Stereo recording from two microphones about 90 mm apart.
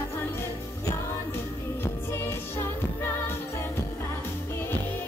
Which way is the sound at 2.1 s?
25° left (ahead or behind).